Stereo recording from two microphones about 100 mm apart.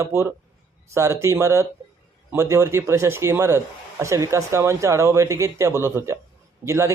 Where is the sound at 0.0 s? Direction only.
30° right (ahead or behind).